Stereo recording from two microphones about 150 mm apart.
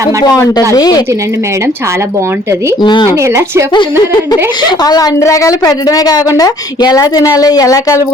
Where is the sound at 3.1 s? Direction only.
20° right (ahead or behind).